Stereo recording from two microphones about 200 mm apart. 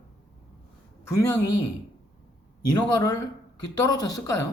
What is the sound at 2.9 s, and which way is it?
Speech, 20° left (ahead or behind).